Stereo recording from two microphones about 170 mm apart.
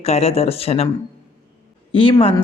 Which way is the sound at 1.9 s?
30° left (ahead or behind).